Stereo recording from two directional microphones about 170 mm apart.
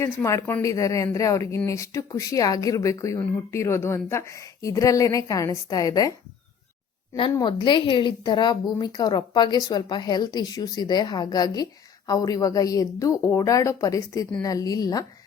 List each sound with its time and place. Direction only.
0.0 s a woman's voice: 15° left (ahead or behind)
7.2 s a woman's voice: 25° left (ahead or behind)